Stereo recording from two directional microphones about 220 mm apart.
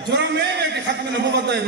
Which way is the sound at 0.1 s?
50° right (ahead or behind).